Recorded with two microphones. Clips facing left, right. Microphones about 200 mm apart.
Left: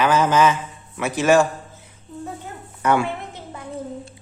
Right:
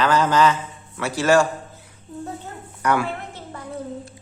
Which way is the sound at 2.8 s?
25° left (ahead or behind).